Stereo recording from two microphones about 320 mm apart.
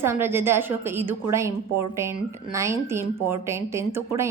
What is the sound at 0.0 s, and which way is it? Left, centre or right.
A woman's voice, centre.